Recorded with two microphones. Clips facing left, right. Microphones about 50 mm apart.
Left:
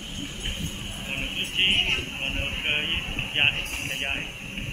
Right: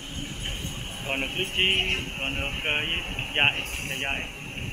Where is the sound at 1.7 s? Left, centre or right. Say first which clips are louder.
Left 1 dB; left.